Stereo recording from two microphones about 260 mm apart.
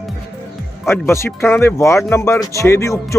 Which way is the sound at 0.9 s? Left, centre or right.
Centre.